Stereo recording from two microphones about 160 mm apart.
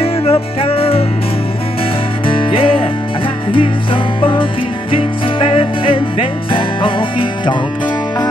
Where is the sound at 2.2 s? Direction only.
30° left (ahead or behind).